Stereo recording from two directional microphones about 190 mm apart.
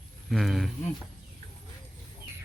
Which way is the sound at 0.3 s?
Centre (ahead or behind).